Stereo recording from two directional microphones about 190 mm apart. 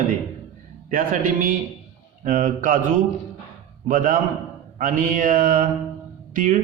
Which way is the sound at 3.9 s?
45° right (ahead or behind).